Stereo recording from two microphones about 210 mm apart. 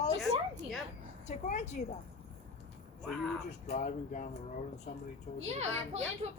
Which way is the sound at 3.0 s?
5° left (ahead or behind).